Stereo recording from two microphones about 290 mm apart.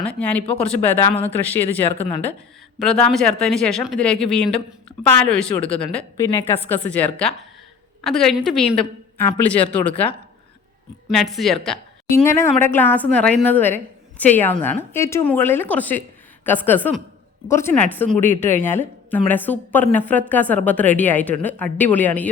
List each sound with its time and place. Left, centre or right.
0.0 s a woman's voice: centre
11.1 s a woman's voice: centre